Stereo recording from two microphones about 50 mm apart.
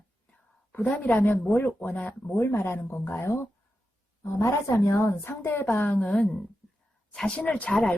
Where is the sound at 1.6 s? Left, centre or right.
Left.